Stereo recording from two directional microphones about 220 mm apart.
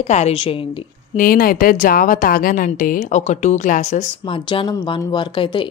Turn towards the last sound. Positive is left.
turn(degrees=20)  # may be behind; listen again after turning